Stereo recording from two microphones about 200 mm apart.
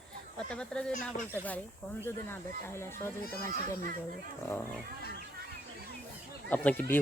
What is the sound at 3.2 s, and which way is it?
Speech, 45° left (ahead or behind).